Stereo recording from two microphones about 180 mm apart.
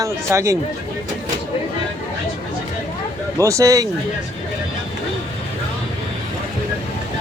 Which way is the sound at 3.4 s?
15° right (ahead or behind).